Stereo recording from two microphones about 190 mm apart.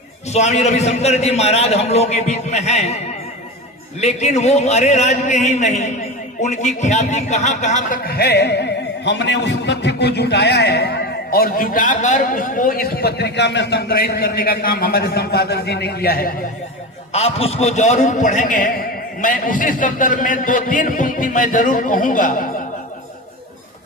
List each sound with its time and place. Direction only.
0.3 s a man's voice: 35° left (ahead or behind)
4.0 s a man's voice: 35° left (ahead or behind); by 16.3 s 55° left (ahead or behind)
17.1 s a man's voice: 30° left (ahead or behind)